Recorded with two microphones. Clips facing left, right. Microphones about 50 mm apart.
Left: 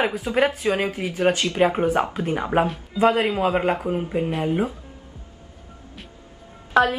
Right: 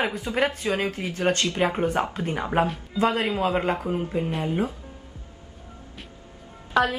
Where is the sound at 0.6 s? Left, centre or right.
Centre.